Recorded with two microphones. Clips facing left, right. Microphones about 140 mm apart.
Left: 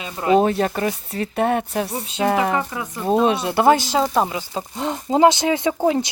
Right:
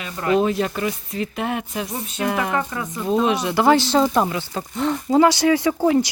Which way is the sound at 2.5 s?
10° left (ahead or behind).